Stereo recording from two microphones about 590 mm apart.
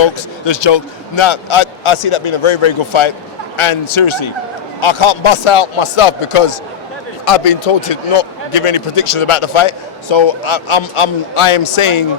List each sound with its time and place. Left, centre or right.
0.0 s a man's voice: left